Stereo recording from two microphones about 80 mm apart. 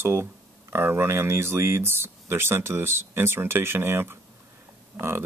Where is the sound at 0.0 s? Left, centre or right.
Right.